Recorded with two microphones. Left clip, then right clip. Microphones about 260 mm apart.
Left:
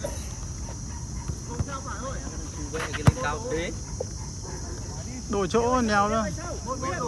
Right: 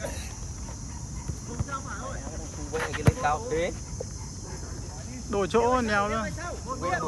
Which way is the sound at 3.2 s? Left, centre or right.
Right.